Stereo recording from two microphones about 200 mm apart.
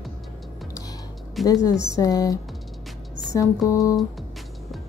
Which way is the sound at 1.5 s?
20° left (ahead or behind).